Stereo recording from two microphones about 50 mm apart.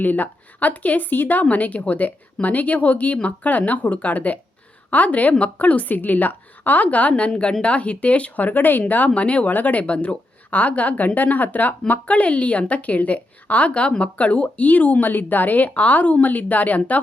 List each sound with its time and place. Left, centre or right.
0.0 s speech: left
7.1 s a woman's voice: left
9.0 s a woman's voice: left
9.5 s a woman's voice: left